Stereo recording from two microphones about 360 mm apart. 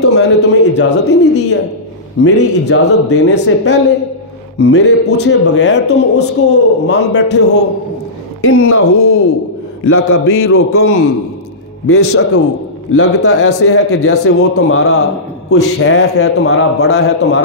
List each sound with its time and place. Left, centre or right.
0.1 s a woman's voice: left